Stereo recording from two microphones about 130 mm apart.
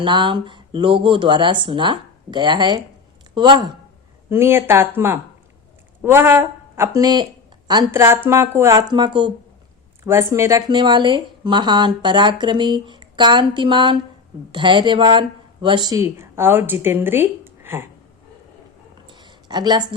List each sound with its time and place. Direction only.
0.0 s a woman's voice: 35° right (ahead or behind)
4.3 s a woman's voice: 20° right (ahead or behind)
7.0 s a woman's voice: 30° right (ahead or behind)
7.9 s speech: 20° right (ahead or behind)
8.9 s a woman's voice: 35° right (ahead or behind)
10.0 s speech: 20° right (ahead or behind)
10.7 s a woman's voice: 35° right (ahead or behind); by 17.8 s 15° right (ahead or behind)
19.0 s a sound: 35° right (ahead or behind)